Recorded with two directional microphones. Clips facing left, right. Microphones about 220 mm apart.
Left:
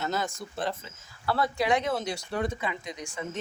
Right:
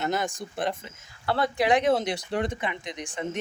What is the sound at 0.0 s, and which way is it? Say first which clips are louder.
Speech: right 3 dB; 15° right (ahead or behind).